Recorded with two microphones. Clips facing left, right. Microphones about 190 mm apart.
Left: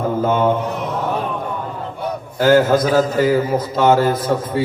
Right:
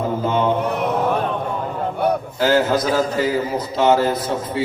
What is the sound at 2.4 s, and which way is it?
A man's voice, 50° left (ahead or behind).